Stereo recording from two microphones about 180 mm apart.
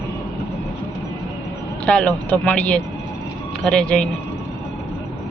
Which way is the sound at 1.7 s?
5° left (ahead or behind).